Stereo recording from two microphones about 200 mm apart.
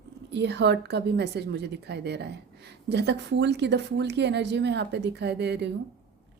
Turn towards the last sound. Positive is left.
turn(degrees=-60)  # may be behind; listen again after turning